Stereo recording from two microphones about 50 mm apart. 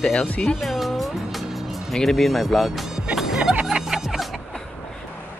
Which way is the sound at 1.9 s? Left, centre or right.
Centre.